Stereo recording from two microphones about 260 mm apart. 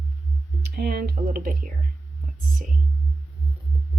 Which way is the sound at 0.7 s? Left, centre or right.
Right.